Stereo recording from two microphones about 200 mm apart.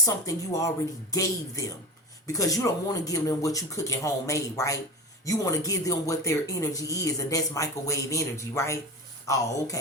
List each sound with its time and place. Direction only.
0.0 s speech: 15° left (ahead or behind)